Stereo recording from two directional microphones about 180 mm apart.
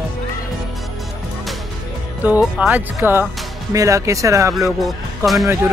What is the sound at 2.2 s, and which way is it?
Speech, 10° right (ahead or behind).